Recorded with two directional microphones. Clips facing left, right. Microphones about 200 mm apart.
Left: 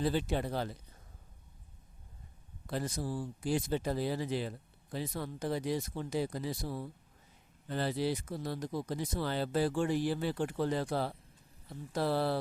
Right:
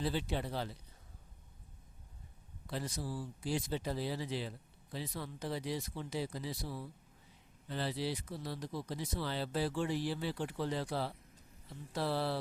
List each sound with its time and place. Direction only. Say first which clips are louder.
0.0 s speech: left 4 dB; 50° left (ahead or behind)
2.6 s speech: left 4 dB; 50° left (ahead or behind)